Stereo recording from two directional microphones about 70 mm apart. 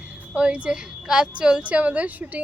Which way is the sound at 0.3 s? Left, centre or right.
Centre.